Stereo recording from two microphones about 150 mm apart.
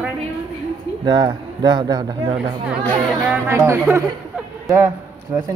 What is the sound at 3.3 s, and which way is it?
Speech, 15° right (ahead or behind).